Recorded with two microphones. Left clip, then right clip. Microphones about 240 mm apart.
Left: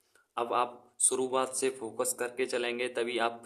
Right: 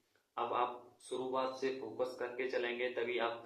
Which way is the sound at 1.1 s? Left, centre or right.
Left.